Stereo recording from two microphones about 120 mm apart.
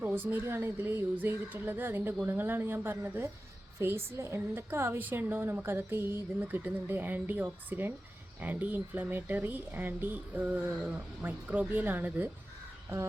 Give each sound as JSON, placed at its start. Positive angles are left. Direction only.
{"t": 0.0, "sound": "a woman's voice", "side_deg": -15}